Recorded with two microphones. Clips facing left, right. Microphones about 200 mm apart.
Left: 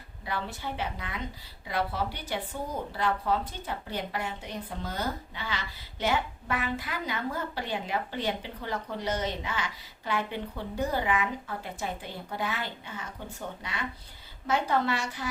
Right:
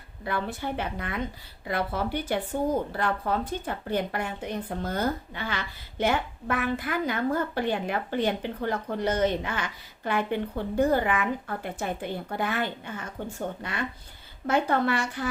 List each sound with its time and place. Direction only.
0.3 s speech: 55° right (ahead or behind)